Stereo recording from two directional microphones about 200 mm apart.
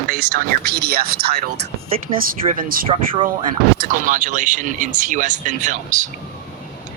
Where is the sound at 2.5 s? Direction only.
45° right (ahead or behind).